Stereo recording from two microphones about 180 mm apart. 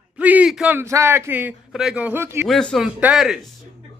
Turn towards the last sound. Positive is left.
turn(degrees=0)  # may be behind; listen again after turning